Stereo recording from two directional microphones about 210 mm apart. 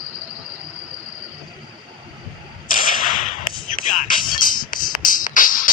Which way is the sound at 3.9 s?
40° left (ahead or behind).